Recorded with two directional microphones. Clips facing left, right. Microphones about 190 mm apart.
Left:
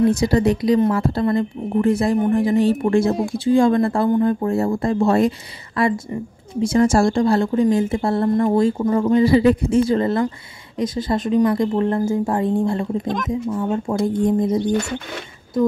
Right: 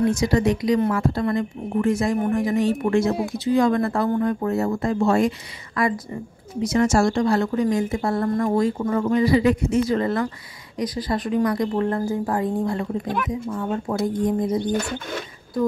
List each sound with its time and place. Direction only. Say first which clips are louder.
0.1 s a woman's voice: left 3 dB; 35° left (ahead or behind)
13.9 s speech: left 2 dB; 10° left (ahead or behind)
14.2 s a woman's voice: left 4 dB; 25° left (ahead or behind)